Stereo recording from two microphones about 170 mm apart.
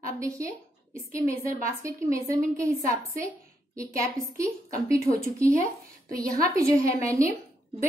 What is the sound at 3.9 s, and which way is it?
A woman's voice, 20° right (ahead or behind).